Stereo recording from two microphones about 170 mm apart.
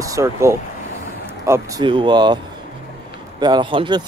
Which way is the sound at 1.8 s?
30° right (ahead or behind).